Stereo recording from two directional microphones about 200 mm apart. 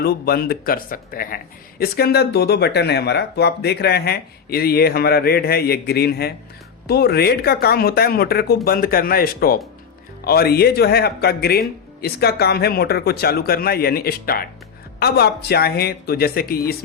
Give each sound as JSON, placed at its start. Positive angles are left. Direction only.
{"t": 0.0, "sound": "speech", "side_deg": 50}